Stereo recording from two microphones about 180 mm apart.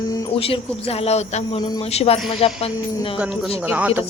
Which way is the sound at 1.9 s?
35° left (ahead or behind).